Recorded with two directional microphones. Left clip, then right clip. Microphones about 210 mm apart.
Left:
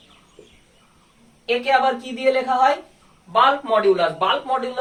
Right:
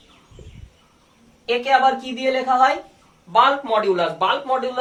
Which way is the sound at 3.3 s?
30° right (ahead or behind).